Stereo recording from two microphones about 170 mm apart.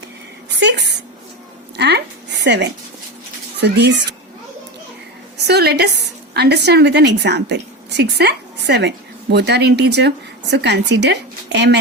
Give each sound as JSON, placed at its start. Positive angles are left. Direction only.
{"t": 0.6, "sound": "a woman's voice", "side_deg": -80}
{"t": 2.4, "sound": "speech", "side_deg": -90}
{"t": 3.6, "sound": "speech", "side_deg": -75}
{"t": 5.4, "sound": "a woman's voice", "side_deg": -75}
{"t": 8.2, "sound": "a woman's voice", "side_deg": -80}